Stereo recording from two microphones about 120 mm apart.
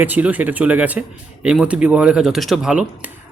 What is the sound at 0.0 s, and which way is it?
A man's voice, 15° right (ahead or behind).